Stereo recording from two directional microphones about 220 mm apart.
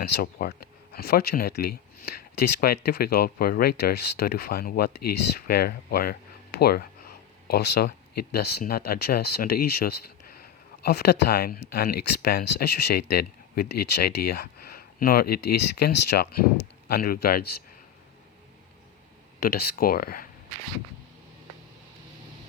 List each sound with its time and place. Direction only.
0.0 s speech: 45° left (ahead or behind)
19.4 s speech: 45° left (ahead or behind)